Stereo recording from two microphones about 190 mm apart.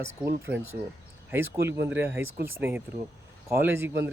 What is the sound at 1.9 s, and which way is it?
Speech, 15° right (ahead or behind).